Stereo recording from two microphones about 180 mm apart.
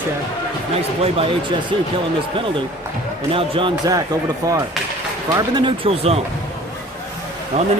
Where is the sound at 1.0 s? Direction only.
35° right (ahead or behind).